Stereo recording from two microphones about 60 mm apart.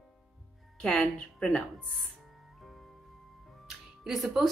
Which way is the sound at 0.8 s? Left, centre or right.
Centre.